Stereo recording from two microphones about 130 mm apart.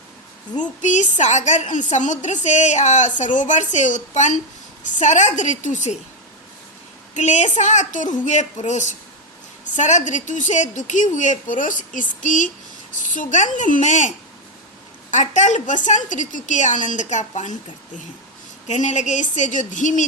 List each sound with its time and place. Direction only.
0.5 s a woman's voice: 70° left (ahead or behind)
7.1 s a woman's voice: 65° left (ahead or behind)
15.1 s a woman's voice: 70° left (ahead or behind)
18.7 s a woman's voice: 65° left (ahead or behind)